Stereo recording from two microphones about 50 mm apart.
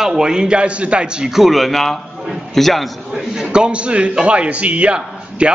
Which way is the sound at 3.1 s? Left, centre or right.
Centre.